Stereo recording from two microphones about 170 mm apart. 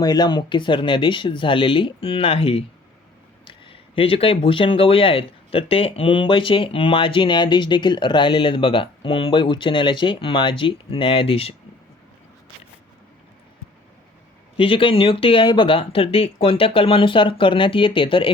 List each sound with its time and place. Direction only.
0.0 s speech: 25° left (ahead or behind)
14.5 s speech: 30° left (ahead or behind)